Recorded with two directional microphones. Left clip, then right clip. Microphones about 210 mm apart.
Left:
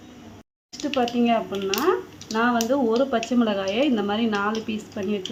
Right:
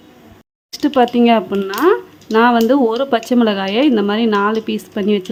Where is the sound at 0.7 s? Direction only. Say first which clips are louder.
Right 10 dB; 45° right (ahead or behind).